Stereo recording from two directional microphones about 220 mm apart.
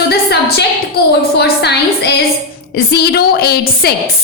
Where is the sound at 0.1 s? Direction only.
45° left (ahead or behind).